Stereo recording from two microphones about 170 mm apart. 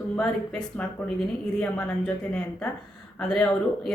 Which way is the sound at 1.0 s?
10° left (ahead or behind).